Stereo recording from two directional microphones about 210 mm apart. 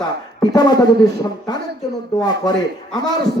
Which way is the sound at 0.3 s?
20° left (ahead or behind).